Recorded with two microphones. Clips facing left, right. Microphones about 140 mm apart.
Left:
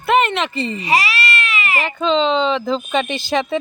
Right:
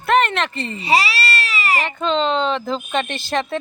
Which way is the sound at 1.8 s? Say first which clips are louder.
Left 6 dB; centre (ahead or behind).